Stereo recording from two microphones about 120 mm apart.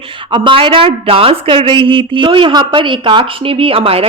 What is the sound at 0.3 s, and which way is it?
Speech, 40° right (ahead or behind).